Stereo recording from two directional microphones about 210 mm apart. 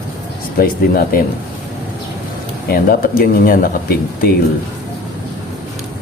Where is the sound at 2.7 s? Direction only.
45° left (ahead or behind).